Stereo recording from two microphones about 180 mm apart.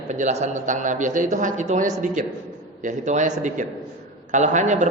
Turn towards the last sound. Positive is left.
turn(degrees=-40)  # may be behind; listen again after turning